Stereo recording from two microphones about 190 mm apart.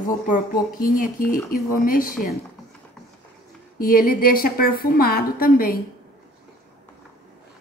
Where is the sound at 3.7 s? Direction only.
50° left (ahead or behind).